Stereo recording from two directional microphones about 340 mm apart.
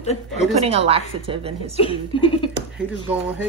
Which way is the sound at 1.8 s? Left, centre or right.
Centre.